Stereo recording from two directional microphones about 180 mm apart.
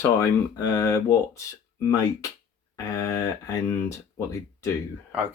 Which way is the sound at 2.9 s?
15° left (ahead or behind).